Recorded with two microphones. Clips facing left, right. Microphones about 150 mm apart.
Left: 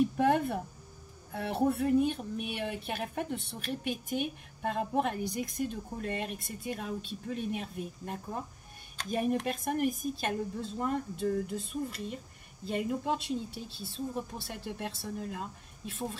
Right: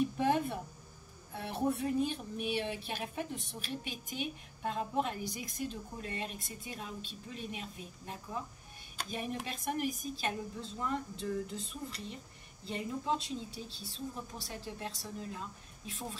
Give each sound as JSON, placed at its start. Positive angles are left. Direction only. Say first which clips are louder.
{"t": 0.2, "sound": "a woman's voice", "louder": "left 4 dB", "side_deg": 55}